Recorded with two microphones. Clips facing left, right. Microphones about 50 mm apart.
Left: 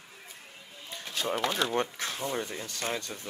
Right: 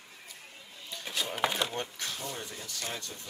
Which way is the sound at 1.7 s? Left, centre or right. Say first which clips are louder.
Left 6 dB; left.